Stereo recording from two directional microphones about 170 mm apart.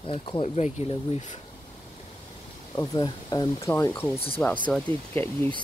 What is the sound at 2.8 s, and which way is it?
Speech, 20° left (ahead or behind).